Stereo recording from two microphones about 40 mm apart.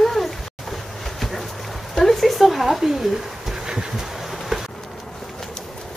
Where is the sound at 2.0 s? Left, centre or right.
Centre.